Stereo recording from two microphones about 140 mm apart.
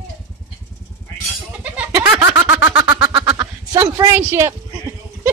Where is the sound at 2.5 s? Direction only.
10° right (ahead or behind).